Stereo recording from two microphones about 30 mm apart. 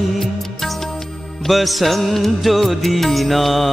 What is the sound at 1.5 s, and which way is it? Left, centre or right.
Music, centre.